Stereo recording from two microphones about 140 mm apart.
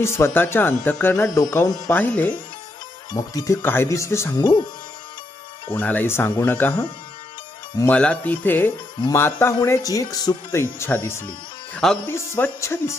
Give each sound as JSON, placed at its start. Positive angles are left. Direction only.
{"t": 0.0, "sound": "speech", "side_deg": 20}
{"t": 3.1, "sound": "speech", "side_deg": 25}
{"t": 5.7, "sound": "speech", "side_deg": 10}